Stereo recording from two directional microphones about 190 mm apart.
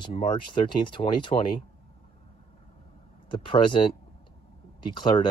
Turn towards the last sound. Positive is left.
turn(degrees=25)  # may be behind; listen again after turning